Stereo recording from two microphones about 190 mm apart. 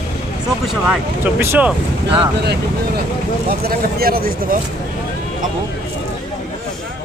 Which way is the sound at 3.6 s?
50° right (ahead or behind).